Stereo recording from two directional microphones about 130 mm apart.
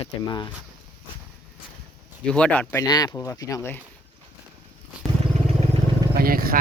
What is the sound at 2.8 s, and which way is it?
Speech, 30° left (ahead or behind).